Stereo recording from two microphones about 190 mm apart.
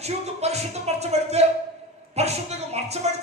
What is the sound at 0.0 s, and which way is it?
Music, 35° right (ahead or behind).